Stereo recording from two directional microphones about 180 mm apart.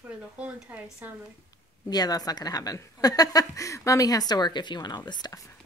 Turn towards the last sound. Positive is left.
turn(degrees=25)  # may be behind; listen again after turning